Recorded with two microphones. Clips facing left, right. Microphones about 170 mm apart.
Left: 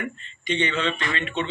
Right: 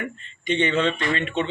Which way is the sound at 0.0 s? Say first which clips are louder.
Right 1 dB; 50° right (ahead or behind).